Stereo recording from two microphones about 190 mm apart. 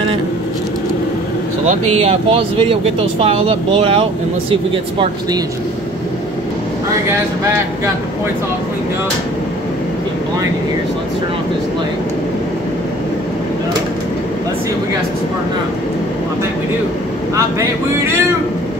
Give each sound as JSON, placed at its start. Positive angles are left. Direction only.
{"t": 2.0, "sound": "speech", "side_deg": -30}